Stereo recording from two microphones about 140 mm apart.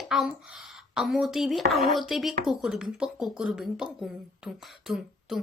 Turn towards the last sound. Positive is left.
turn(degrees=0)  # may be behind; listen again after turning